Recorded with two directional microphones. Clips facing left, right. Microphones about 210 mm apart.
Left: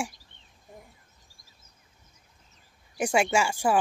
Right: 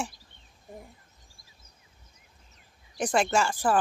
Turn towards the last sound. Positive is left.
turn(degrees=10)  # may be behind; listen again after turning